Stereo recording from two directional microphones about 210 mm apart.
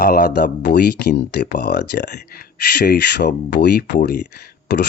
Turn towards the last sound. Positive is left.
turn(degrees=50)  # may be behind; listen again after turning